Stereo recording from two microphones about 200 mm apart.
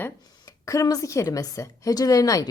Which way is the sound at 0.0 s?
15° left (ahead or behind).